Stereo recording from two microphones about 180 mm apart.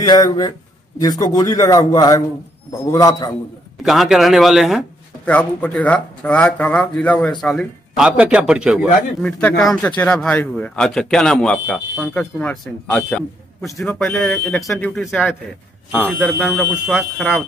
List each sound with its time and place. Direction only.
0.0 s a man's voice: 20° left (ahead or behind)
3.8 s a man's voice: centre (ahead or behind)
16.4 s a man's voice: centre (ahead or behind)